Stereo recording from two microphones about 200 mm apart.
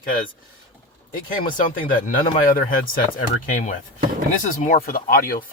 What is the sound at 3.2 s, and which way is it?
Speech, 40° left (ahead or behind).